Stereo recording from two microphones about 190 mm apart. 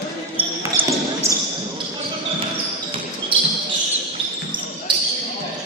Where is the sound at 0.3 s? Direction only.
10° right (ahead or behind).